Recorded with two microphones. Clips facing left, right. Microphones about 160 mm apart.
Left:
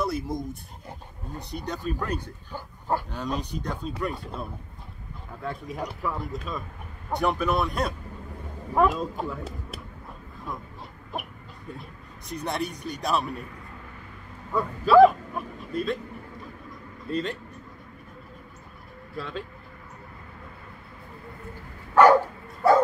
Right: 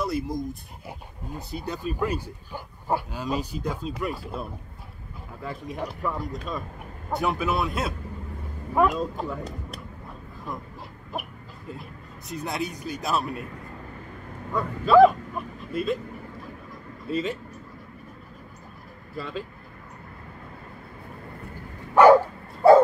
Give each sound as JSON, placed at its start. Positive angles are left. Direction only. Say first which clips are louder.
{"t": 0.0, "sound": "speech", "louder": "right 1 dB", "side_deg": 0}
{"t": 12.3, "sound": "speech", "louder": "even", "side_deg": 0}
{"t": 14.5, "sound": "speech", "louder": "even", "side_deg": 0}
{"t": 17.1, "sound": "speech", "louder": "right 2 dB", "side_deg": -5}
{"t": 19.1, "sound": "speech", "louder": "right 1 dB", "side_deg": 0}
{"t": 22.6, "sound": "bow-wow", "louder": "right 5 dB", "side_deg": -30}